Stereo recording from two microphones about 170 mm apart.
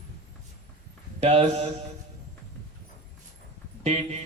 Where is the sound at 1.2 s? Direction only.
40° right (ahead or behind).